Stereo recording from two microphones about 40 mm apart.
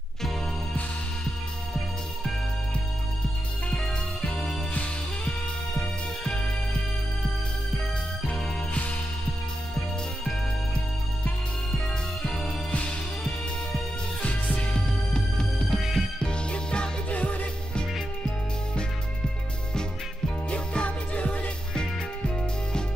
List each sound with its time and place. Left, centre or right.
4.2 s music: left
8.3 s music: left
12.7 s music: left
14.7 s music: centre
15.8 s music: centre
16.2 s music: left
17.1 s music: left
20.4 s music: left